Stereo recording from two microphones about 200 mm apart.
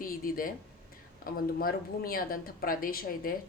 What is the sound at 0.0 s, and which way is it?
A woman's voice, 45° left (ahead or behind).